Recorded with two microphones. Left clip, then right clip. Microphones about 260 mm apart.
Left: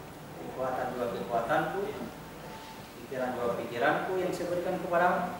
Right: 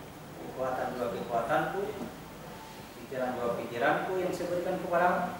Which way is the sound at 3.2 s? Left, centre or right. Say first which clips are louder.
Even; centre.